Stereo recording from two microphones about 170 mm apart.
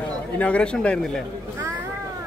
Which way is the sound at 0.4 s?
5° left (ahead or behind).